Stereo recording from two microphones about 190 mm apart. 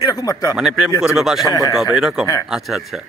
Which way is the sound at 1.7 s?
Centre (ahead or behind).